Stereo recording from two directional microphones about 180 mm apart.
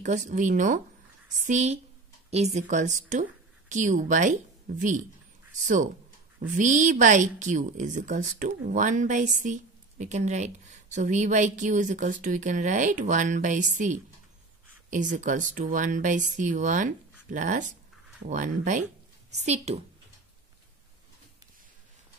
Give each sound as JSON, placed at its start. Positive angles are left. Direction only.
{"t": 0.0, "sound": "a woman's voice", "side_deg": -40}
{"t": 6.4, "sound": "a woman's voice", "side_deg": -45}